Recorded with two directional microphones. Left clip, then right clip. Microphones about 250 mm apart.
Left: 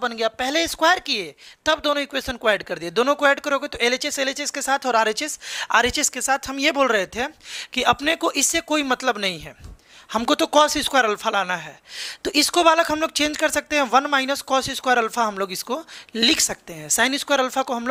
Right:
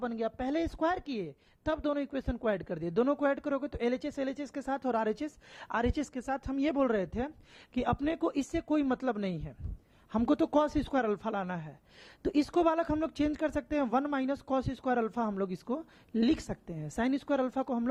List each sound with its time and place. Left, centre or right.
0.0 s speech: centre
16.5 s speech: centre
17.1 s speech: centre